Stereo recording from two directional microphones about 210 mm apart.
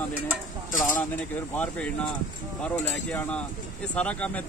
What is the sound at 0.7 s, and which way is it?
Speech, 40° left (ahead or behind).